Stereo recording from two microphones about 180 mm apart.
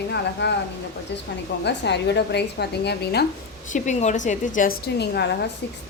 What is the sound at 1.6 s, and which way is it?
A woman's voice, 70° left (ahead or behind).